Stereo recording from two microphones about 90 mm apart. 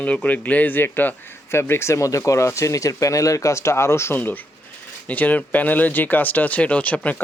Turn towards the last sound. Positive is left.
turn(degrees=15)  # may be behind; listen again after turning